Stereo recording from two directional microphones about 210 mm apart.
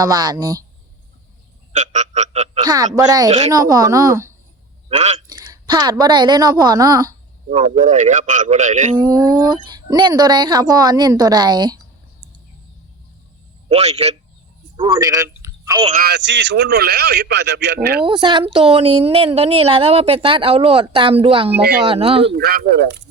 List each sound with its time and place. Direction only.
0.0 s a woman's voice: 20° right (ahead or behind)
1.7 s a sound: 35° right (ahead or behind)
2.6 s a woman's voice: 15° right (ahead or behind)
4.9 s a man's voice: 30° right (ahead or behind)
5.3 s a woman's voice: 20° right (ahead or behind)
7.8 s a man's voice: 35° right (ahead or behind)
9.0 s a woman's voice: 20° right (ahead or behind)
13.7 s a man's voice: 30° right (ahead or behind)
14.9 s speech: 15° right (ahead or behind)
16.0 s a man's voice: 50° right (ahead or behind)
18.0 s a woman's voice: 25° right (ahead or behind)
22.3 s a man's voice: 50° right (ahead or behind)